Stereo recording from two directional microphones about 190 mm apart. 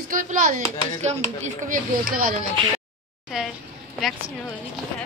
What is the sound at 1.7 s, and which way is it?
Speech, 45° right (ahead or behind).